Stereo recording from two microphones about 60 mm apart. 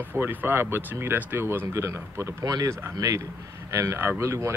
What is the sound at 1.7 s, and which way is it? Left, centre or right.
Speech, right.